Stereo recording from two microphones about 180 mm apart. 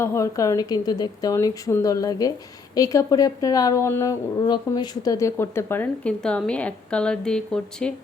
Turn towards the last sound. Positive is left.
turn(degrees=5)  # may be behind; listen again after turning